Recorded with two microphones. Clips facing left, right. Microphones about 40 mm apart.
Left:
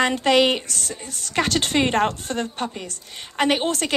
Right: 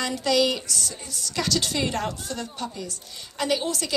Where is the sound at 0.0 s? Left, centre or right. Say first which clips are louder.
Left 5 dB; left.